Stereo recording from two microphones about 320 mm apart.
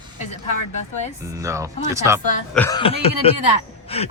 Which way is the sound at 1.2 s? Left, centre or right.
Centre.